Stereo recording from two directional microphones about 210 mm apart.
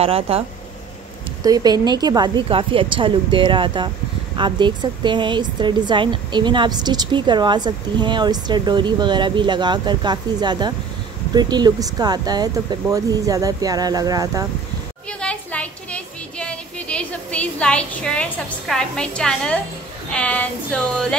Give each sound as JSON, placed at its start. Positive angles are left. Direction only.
{"t": 0.0, "sound": "a woman's voice", "side_deg": -25}
{"t": 1.4, "sound": "a woman's voice", "side_deg": -20}
{"t": 15.0, "sound": "a sound", "side_deg": 5}
{"t": 20.1, "sound": "speech", "side_deg": 5}